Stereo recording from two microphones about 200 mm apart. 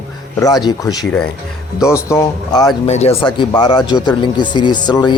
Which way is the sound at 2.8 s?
30° left (ahead or behind).